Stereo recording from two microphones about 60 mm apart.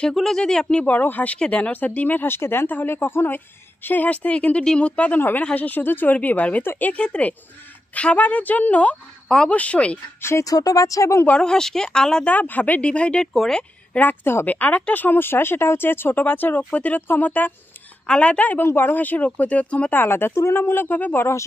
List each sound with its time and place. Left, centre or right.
0.1 s speech: centre
0.8 s speech: left
10.4 s speech: left
11.3 s speech: centre
12.4 s speech: left
12.9 s speech: centre
13.3 s speech: centre
14.4 s speech: left
18.0 s speech: centre
18.6 s speech: left
20.0 s speech: left